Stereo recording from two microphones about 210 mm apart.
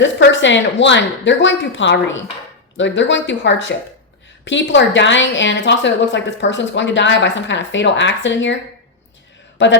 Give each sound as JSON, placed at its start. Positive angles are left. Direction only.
{"t": 0.0, "sound": "a woman's voice", "side_deg": 60}
{"t": 9.6, "sound": "a woman's voice", "side_deg": 60}